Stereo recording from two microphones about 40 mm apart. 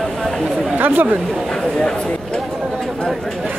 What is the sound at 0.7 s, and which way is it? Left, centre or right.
Speech, right.